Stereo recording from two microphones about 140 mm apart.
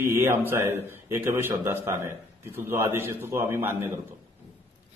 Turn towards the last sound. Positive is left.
turn(degrees=-20)  # may be behind; listen again after turning